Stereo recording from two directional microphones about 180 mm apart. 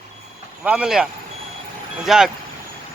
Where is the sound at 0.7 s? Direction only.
5° right (ahead or behind).